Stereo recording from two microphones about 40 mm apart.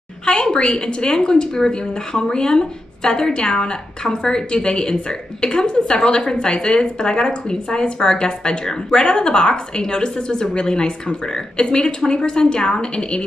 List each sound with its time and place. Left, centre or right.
0.2 s a woman's voice: centre